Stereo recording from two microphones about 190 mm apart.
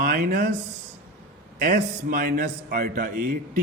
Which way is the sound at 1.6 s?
45° right (ahead or behind).